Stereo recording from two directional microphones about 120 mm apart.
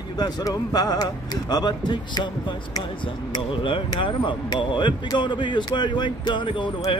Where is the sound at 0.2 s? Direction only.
30° left (ahead or behind).